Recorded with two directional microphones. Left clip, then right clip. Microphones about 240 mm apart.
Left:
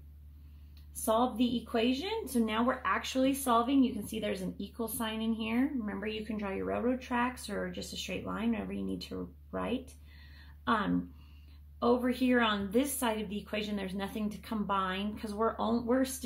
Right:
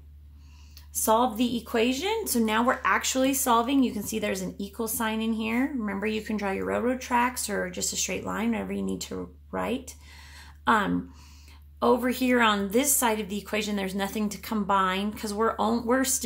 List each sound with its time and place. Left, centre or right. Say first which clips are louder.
1.0 s speech: right 6 dB; right
10.3 s a sound: right 8 dB; right
11.8 s speech: right 6 dB; right